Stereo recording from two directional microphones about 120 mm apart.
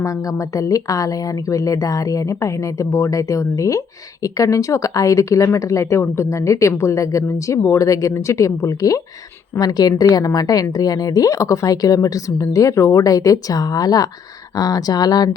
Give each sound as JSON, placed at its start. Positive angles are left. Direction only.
{"t": 0.0, "sound": "a woman's voice", "side_deg": 30}